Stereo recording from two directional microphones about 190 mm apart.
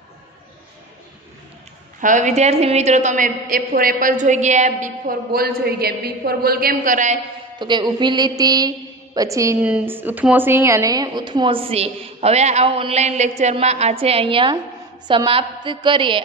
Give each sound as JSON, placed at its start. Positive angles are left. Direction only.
{"t": 2.0, "sound": "a woman's voice", "side_deg": -40}
{"t": 7.5, "sound": "a woman's voice", "side_deg": -25}